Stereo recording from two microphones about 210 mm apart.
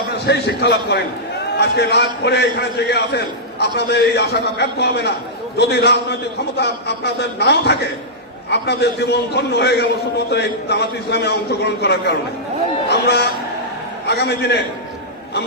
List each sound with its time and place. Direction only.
0.3 s a man's voice: 50° left (ahead or behind)